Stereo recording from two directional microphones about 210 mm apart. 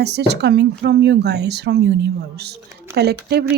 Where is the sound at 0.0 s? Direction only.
55° right (ahead or behind).